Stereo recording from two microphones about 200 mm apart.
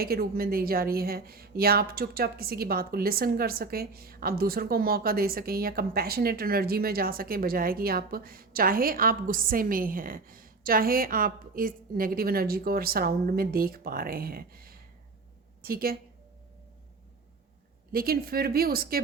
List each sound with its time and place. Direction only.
0.0 s a woman's voice: 50° right (ahead or behind)
17.9 s a woman's voice: 50° right (ahead or behind)